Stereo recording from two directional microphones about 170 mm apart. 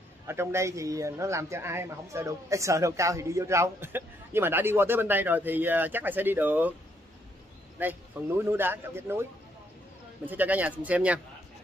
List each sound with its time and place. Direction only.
0.3 s speech: 15° right (ahead or behind)
7.8 s speech: 10° right (ahead or behind)
10.2 s speech: 10° right (ahead or behind)